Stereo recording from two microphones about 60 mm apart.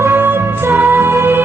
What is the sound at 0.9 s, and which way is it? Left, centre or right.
Music, right.